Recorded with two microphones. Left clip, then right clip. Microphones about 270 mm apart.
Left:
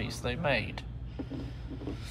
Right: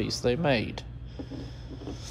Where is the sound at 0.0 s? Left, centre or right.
Right.